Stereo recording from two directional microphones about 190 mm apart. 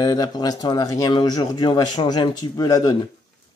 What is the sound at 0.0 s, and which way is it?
Speech, 20° left (ahead or behind).